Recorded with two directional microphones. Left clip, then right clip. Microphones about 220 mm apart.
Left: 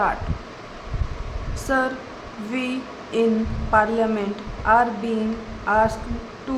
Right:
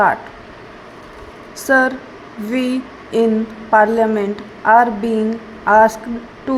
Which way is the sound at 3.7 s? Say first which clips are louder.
Right 7 dB; 20° right (ahead or behind).